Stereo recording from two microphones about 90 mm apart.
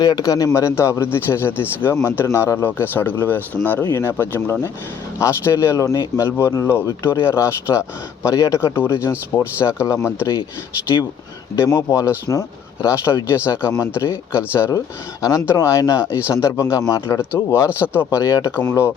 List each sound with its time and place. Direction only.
0.0 s a man's voice: 45° left (ahead or behind)
11.5 s speech: 30° left (ahead or behind)